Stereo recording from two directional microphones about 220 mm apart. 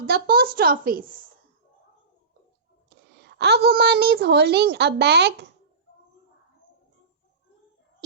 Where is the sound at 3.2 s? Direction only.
50° right (ahead or behind).